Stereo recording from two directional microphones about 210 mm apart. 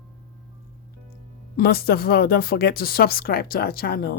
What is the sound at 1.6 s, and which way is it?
Speech, 45° left (ahead or behind).